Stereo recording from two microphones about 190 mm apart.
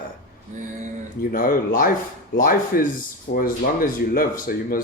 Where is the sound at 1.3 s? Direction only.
50° left (ahead or behind).